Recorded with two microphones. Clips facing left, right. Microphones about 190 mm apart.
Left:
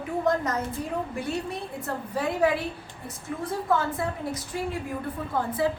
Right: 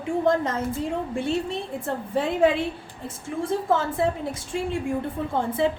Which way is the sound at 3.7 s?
25° right (ahead or behind).